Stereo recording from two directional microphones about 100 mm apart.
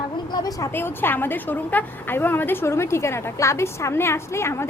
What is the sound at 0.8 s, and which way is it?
A woman's voice, 20° left (ahead or behind).